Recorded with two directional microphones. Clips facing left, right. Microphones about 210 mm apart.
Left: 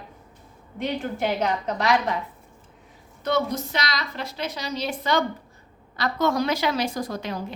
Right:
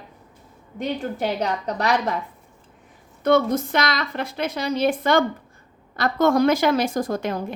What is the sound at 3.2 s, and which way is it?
Speech, 55° right (ahead or behind).